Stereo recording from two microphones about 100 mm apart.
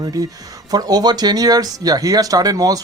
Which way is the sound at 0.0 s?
40° right (ahead or behind).